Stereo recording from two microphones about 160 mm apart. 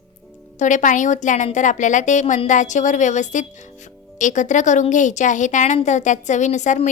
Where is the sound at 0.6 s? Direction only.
50° left (ahead or behind).